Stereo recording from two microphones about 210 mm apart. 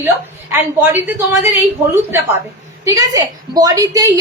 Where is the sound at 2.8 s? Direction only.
15° right (ahead or behind).